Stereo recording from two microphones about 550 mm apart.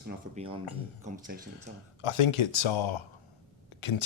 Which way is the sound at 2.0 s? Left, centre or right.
Left.